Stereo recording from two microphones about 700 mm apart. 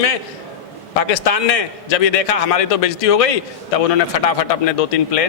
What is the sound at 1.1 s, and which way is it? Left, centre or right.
A man's voice, left.